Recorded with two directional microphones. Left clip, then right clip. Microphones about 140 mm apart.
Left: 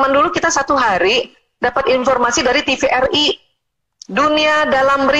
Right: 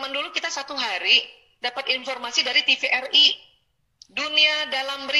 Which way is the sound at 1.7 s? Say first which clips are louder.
Left 14 dB; 50° left (ahead or behind).